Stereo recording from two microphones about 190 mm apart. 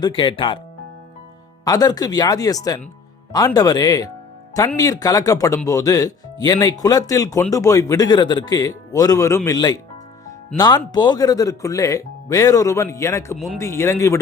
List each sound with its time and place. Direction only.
0.0 s speech: 25° left (ahead or behind)
1.6 s speech: 20° left (ahead or behind)